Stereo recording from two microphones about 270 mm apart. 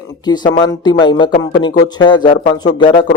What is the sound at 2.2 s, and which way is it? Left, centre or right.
Speech, left.